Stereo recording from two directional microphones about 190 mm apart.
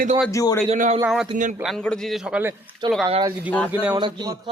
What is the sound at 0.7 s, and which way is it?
Speech, 40° right (ahead or behind).